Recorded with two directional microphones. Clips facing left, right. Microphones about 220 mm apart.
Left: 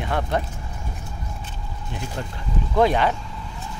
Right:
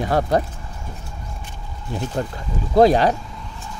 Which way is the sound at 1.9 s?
40° right (ahead or behind).